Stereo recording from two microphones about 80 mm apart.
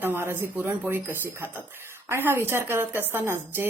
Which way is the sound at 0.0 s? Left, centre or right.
Right.